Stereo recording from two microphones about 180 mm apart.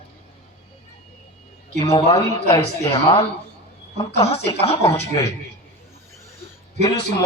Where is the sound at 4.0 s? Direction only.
30° left (ahead or behind).